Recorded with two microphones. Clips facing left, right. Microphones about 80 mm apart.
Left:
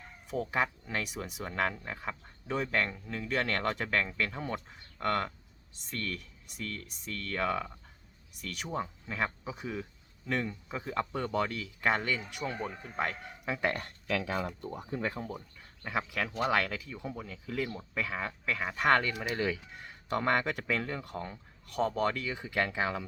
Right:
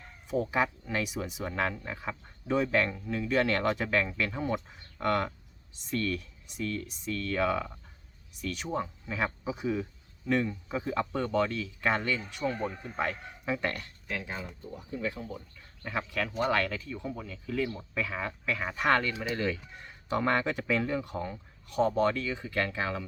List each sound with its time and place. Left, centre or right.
0.5 s speech: centre
14.1 s speech: left
14.7 s speech: left
15.8 s speech: centre